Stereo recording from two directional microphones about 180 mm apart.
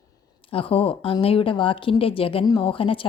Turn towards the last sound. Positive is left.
turn(degrees=30)  # may be behind; listen again after turning